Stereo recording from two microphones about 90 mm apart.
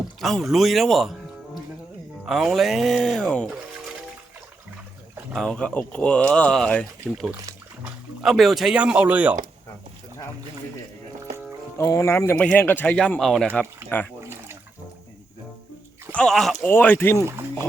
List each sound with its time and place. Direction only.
0.2 s speech: centre (ahead or behind)
2.2 s speech: 5° right (ahead or behind)
5.3 s speech: 5° left (ahead or behind)
8.7 s speech: 15° right (ahead or behind)
11.9 s speech: 30° left (ahead or behind)
12.4 s speech: 10° left (ahead or behind)
13.1 s speech: 5° left (ahead or behind)
13.9 s speech: 20° left (ahead or behind)
16.1 s speech: 5° left (ahead or behind)
16.6 s speech: 20° left (ahead or behind)